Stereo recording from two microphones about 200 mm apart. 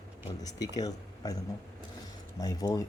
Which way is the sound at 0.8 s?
20° left (ahead or behind).